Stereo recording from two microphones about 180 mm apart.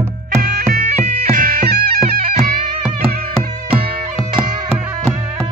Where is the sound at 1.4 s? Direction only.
55° right (ahead or behind).